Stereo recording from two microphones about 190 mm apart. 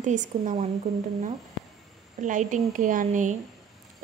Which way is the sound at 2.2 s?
40° right (ahead or behind).